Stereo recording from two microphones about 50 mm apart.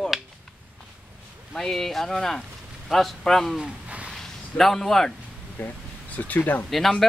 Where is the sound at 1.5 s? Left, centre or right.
Centre.